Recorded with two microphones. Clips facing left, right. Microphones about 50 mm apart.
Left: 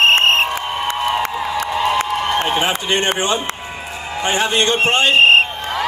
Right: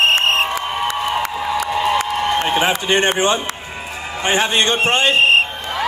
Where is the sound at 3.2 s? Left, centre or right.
Right.